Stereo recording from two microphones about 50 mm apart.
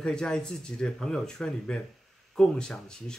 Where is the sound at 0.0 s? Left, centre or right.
Centre.